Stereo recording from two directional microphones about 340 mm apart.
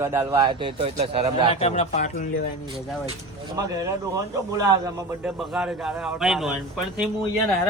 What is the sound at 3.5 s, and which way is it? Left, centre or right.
A man's voice, centre.